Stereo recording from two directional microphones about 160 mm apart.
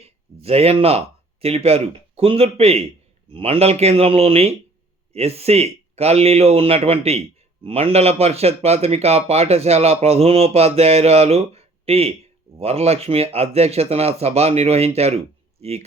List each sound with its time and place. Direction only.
0.0 s a man's voice: 40° right (ahead or behind)